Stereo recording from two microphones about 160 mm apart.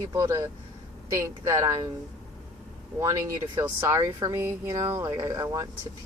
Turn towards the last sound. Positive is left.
turn(degrees=-20)  # may be behind; listen again after turning